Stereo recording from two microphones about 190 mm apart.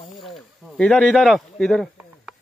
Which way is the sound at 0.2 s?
Centre (ahead or behind).